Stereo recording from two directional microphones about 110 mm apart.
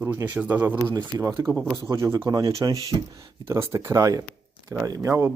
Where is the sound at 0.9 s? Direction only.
30° right (ahead or behind).